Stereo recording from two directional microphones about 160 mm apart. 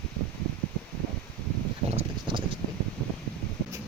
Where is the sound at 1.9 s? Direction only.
35° right (ahead or behind).